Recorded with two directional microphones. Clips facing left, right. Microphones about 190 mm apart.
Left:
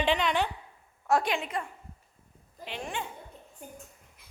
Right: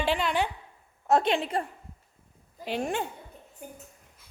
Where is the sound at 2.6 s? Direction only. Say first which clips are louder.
Right 7 dB; 45° right (ahead or behind).